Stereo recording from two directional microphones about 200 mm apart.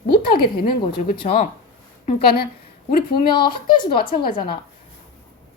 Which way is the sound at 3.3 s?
25° left (ahead or behind).